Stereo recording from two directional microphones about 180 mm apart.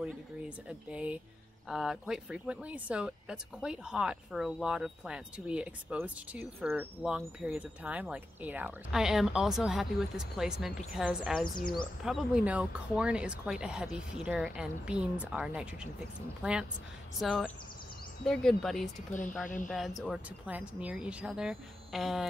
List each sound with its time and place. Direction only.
0.7 s speech: 5° right (ahead or behind)
11.4 s speech: 50° left (ahead or behind)
12.0 s speech: 5° right (ahead or behind)
17.2 s speech: centre (ahead or behind)